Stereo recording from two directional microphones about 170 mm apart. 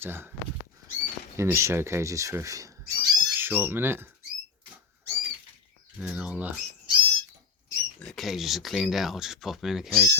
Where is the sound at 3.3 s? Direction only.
10° right (ahead or behind).